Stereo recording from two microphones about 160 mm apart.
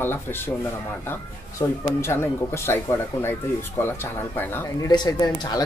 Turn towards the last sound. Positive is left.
turn(degrees=25)  # may be behind; listen again after turning